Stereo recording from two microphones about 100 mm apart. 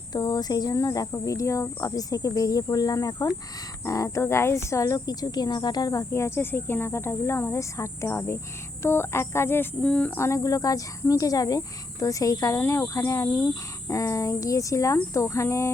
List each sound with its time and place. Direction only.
0.1 s speech: 40° left (ahead or behind); by 9.6 s 25° left (ahead or behind)
9.8 s speech: 10° left (ahead or behind)
10.2 s speech: 30° left (ahead or behind)